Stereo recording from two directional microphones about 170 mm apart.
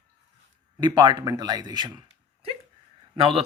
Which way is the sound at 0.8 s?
25° right (ahead or behind).